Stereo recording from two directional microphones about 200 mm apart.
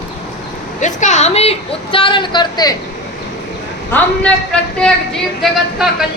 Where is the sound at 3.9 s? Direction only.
5° left (ahead or behind).